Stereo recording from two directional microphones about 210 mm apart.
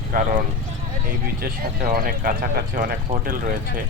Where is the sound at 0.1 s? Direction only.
45° right (ahead or behind).